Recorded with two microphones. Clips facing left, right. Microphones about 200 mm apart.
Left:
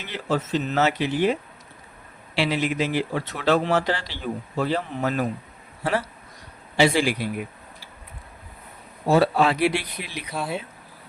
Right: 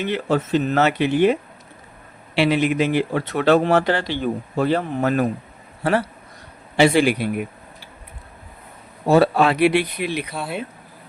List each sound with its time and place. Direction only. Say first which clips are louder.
0.0 s speech: right 6 dB; 60° right (ahead or behind)
9.0 s speech: right 3 dB; 60° right (ahead or behind)
10.3 s speech: even; centre (ahead or behind)